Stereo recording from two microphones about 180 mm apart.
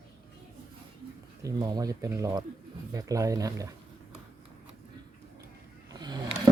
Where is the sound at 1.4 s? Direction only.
20° right (ahead or behind).